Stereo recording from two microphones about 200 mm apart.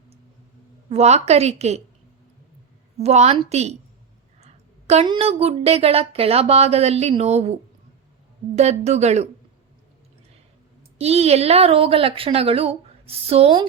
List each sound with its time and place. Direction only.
0.9 s speech: 35° right (ahead or behind)
3.0 s speech: 35° right (ahead or behind)
8.5 s speech: 35° right (ahead or behind)
10.9 s a woman's voice: 30° right (ahead or behind)